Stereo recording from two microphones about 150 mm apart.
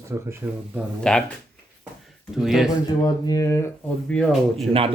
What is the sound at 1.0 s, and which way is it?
Speech, 5° left (ahead or behind).